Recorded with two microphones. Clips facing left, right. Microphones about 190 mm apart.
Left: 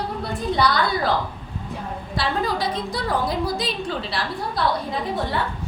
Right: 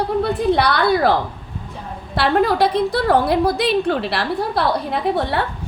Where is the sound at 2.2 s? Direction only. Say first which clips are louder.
Right 8 dB; 65° right (ahead or behind).